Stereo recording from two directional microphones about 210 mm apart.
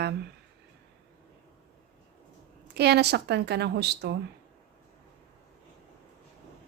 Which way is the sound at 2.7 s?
50° right (ahead or behind).